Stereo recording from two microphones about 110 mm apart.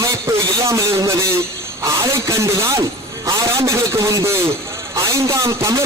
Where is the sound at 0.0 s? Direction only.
30° right (ahead or behind).